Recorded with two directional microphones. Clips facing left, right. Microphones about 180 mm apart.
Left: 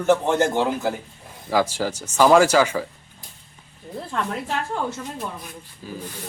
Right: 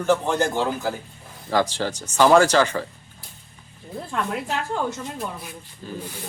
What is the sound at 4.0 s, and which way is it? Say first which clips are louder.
Speech: even; centre (ahead or behind).